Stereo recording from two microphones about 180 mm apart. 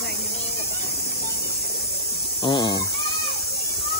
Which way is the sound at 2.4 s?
25° left (ahead or behind).